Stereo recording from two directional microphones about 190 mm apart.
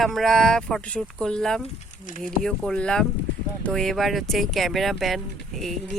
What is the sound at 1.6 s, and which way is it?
Speech, 45° left (ahead or behind).